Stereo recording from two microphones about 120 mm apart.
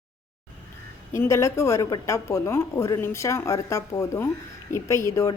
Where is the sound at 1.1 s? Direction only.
25° left (ahead or behind).